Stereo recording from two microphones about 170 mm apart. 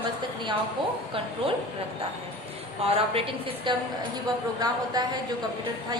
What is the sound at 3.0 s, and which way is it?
A woman's voice, 35° right (ahead or behind).